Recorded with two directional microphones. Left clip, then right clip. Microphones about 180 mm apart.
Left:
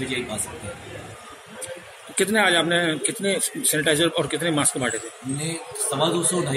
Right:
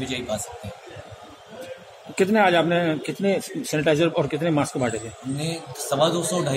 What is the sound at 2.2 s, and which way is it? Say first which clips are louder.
Speech: right 1 dB; 50° right (ahead or behind).